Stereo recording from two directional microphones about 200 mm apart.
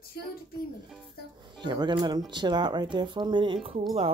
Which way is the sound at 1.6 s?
20° right (ahead or behind).